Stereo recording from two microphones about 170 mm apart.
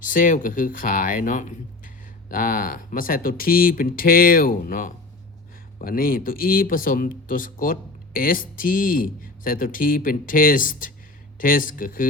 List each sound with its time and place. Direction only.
0.1 s speech: 50° left (ahead or behind)